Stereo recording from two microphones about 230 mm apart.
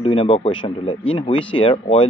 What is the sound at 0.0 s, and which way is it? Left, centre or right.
Speech, left.